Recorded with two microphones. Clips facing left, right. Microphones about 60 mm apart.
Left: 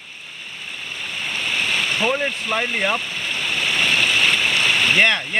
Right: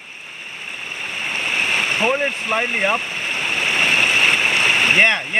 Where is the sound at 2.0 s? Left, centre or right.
Centre.